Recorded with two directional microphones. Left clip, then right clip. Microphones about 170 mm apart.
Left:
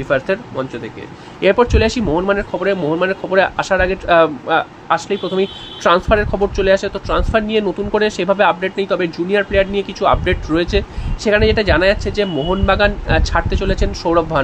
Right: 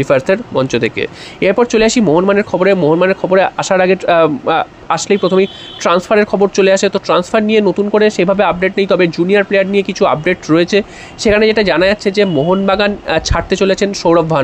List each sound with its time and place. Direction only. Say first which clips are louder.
0.0 s speech: right 5 dB; 50° right (ahead or behind)
1.4 s speech: right 3 dB; 40° right (ahead or behind)